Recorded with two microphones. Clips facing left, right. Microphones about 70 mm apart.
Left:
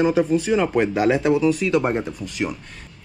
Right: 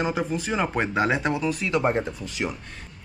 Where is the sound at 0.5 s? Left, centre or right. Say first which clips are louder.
Left 4 dB; centre.